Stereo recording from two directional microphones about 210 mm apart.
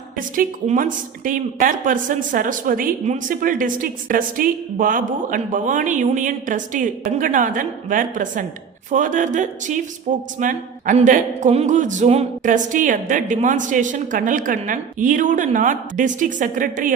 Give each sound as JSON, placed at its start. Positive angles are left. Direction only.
{"t": 0.2, "sound": "a woman's voice", "side_deg": -40}